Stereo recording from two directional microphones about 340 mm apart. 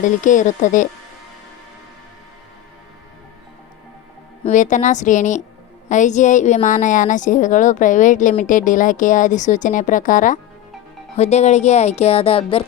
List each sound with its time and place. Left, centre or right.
0.0 s a woman's voice: left
4.4 s a woman's voice: left